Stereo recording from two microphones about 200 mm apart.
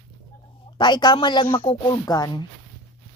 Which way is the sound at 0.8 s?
20° left (ahead or behind).